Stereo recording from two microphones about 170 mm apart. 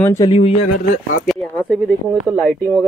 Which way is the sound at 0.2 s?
35° left (ahead or behind).